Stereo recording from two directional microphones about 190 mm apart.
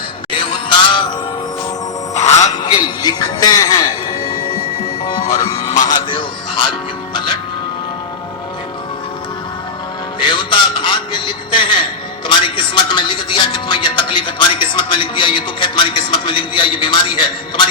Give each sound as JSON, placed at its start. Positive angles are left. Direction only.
{"t": 0.3, "sound": "music", "side_deg": 25}
{"t": 2.1, "sound": "music", "side_deg": 35}
{"t": 2.6, "sound": "speech", "side_deg": 20}
{"t": 5.1, "sound": "music", "side_deg": 15}
{"t": 5.9, "sound": "speech", "side_deg": 25}
{"t": 10.2, "sound": "a man's voice", "side_deg": 25}